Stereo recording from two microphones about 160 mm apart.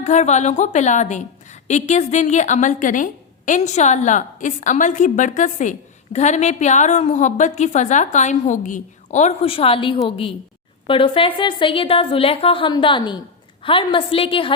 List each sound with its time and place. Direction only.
0.0 s a woman's voice: 45° left (ahead or behind)